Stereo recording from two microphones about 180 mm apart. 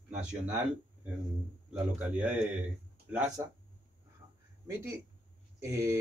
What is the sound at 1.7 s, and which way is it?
Speech, 5° right (ahead or behind).